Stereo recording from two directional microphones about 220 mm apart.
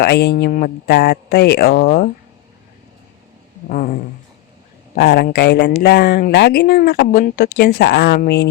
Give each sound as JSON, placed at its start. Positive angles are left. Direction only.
{"t": 0.0, "sound": "speech", "side_deg": 50}
{"t": 4.9, "sound": "speech", "side_deg": 45}